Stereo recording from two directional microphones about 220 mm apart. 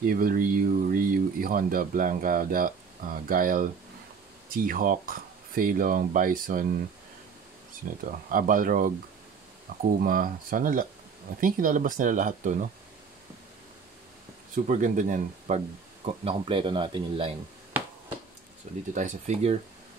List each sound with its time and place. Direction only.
0.0 s speech: 40° right (ahead or behind)
4.6 s speech: 40° right (ahead or behind)
8.0 s speech: 40° right (ahead or behind)
9.9 s speech: 40° right (ahead or behind)
14.5 s speech: 35° right (ahead or behind)
18.9 s speech: 35° right (ahead or behind)